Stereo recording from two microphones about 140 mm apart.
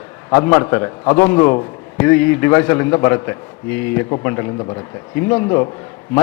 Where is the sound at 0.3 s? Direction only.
20° left (ahead or behind).